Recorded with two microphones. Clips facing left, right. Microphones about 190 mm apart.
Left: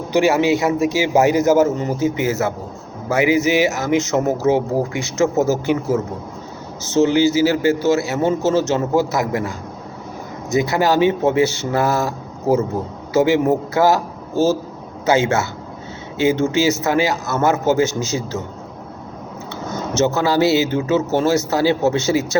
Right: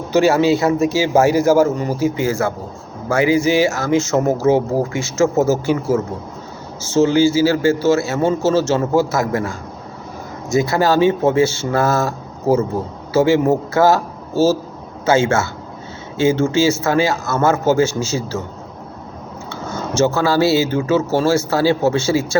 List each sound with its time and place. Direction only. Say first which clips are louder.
0.1 s a man's voice: right 2 dB; 15° left (ahead or behind)
19.5 s a man's voice: even; 20° left (ahead or behind)